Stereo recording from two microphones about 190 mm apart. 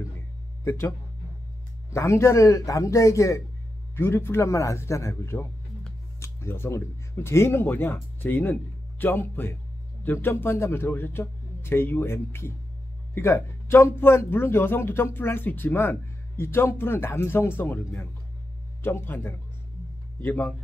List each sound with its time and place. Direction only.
0.7 s speech: 15° left (ahead or behind)